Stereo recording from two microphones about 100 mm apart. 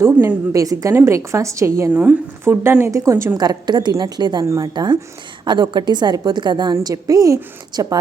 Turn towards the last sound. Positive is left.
turn(degrees=-40)  # may be behind; listen again after turning